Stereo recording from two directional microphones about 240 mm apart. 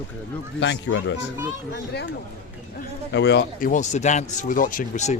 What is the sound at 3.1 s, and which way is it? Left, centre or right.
A man's voice, left.